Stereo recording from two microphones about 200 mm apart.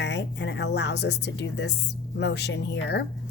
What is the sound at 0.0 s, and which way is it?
A woman's voice, 60° left (ahead or behind).